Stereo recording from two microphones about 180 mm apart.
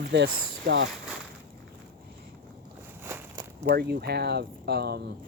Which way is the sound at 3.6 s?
65° right (ahead or behind).